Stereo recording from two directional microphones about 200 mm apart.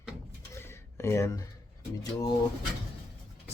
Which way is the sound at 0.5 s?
15° left (ahead or behind).